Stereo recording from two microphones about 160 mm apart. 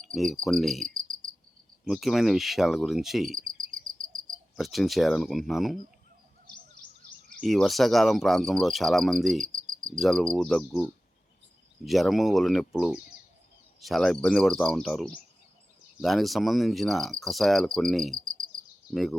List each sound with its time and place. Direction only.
0.1 s speech: 5° left (ahead or behind)
0.4 s cricket: centre (ahead or behind)
4.0 s cricket: 25° right (ahead or behind)
4.5 s cricket: centre (ahead or behind)
7.4 s cricket: centre (ahead or behind)